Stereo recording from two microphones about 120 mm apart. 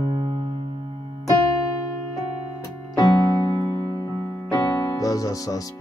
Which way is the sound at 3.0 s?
35° left (ahead or behind).